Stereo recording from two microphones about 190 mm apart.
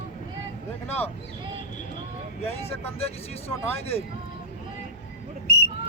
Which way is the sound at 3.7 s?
30° left (ahead or behind).